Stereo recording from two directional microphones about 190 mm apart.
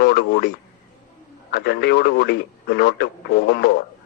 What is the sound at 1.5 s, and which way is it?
Speech, 55° left (ahead or behind).